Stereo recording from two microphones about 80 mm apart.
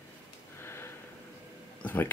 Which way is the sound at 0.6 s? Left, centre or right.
Left.